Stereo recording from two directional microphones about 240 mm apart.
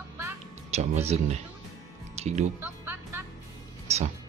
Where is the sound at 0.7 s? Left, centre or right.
Right.